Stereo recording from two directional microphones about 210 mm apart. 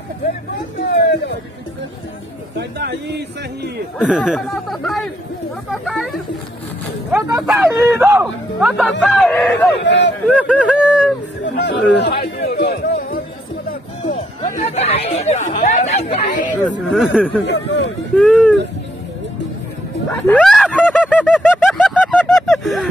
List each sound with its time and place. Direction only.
2.8 s speech: 50° right (ahead or behind)
4.0 s speech: centre (ahead or behind)
7.1 s speech: 5° right (ahead or behind)
9.8 s speech: 55° left (ahead or behind)
10.3 s speech: 5° right (ahead or behind)
11.4 s speech: 55° left (ahead or behind)
12.2 s music: 50° left (ahead or behind)
14.0 s speech: 35° left (ahead or behind)
16.8 s speech: centre (ahead or behind)
17.5 s speech: 55° left (ahead or behind)
18.1 s speech: centre (ahead or behind)
20.1 s a sound: 5° left (ahead or behind)